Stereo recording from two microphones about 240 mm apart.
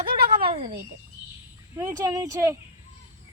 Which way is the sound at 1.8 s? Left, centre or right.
Centre.